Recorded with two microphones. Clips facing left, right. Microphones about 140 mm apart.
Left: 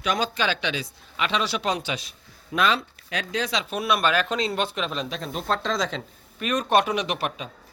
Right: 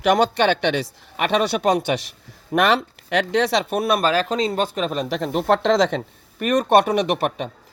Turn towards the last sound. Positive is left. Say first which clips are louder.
# right 7 dB
turn(degrees=-55)  # may be behind; listen again after turning